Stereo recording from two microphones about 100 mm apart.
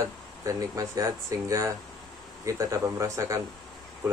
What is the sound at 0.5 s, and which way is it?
Speech, 35° right (ahead or behind).